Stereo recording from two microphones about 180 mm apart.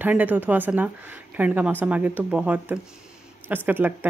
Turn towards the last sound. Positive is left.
turn(degrees=-10)  # may be behind; listen again after turning